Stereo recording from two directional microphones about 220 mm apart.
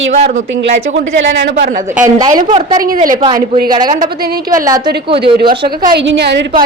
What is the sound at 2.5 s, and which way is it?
Speech, 20° right (ahead or behind).